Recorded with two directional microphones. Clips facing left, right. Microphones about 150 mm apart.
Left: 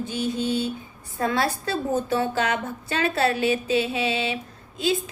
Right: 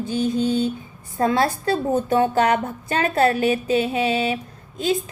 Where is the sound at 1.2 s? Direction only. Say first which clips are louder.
Right 4 dB; 40° right (ahead or behind).